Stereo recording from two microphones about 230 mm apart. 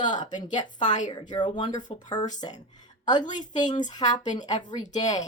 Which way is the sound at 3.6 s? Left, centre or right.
Centre.